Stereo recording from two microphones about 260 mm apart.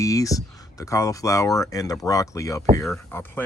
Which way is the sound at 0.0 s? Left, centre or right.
Centre.